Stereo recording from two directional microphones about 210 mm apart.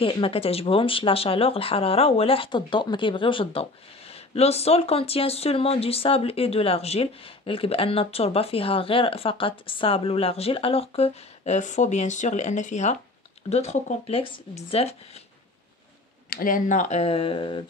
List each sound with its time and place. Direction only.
0.0 s speech: 25° left (ahead or behind)
16.3 s speech: 45° left (ahead or behind); by 17.6 s 25° left (ahead or behind)